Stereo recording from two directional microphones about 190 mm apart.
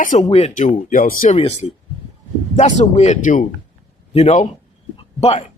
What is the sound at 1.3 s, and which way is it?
Speech, 30° left (ahead or behind).